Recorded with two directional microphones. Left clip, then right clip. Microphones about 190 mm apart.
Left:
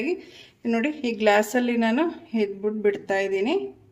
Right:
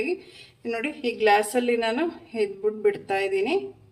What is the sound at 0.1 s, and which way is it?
A woman's voice, 45° left (ahead or behind).